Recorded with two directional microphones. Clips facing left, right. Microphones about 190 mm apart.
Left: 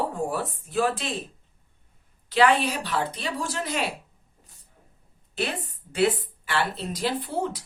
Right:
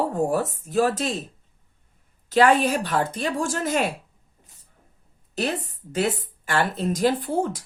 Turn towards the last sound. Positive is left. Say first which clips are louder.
# right 4 dB
turn(degrees=-45)  # may be behind; listen again after turning